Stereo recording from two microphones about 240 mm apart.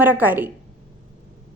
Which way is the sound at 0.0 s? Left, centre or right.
Centre.